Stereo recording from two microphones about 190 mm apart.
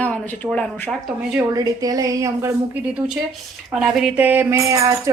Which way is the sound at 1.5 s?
20° right (ahead or behind).